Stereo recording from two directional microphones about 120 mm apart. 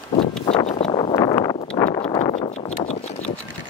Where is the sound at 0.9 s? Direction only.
45° left (ahead or behind).